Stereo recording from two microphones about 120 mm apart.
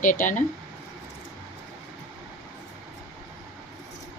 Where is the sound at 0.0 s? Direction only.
90° left.